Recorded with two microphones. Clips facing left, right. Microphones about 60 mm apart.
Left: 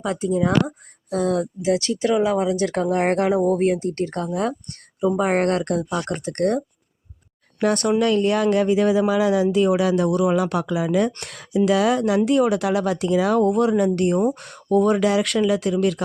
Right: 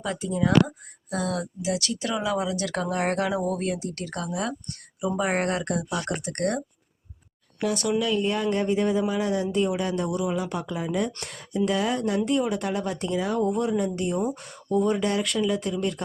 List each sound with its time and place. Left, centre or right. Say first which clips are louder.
0.0 s speech: left 6 dB; left
1.1 s speech: left 7 dB; left
7.6 s speech: left 6 dB; left